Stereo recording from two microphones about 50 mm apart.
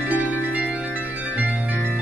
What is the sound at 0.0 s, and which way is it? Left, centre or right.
Music, right.